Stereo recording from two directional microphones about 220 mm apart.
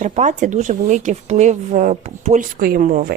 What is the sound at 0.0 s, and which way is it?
Speech, 35° right (ahead or behind).